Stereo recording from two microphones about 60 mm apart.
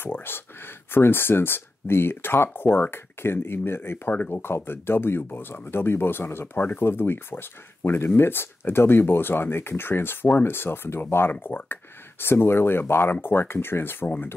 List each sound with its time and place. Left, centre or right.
0.0 s speech: left
14.0 s speech: left